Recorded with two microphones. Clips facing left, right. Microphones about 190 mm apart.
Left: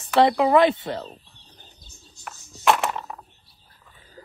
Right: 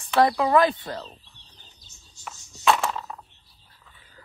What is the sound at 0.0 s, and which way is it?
Speech, 20° left (ahead or behind).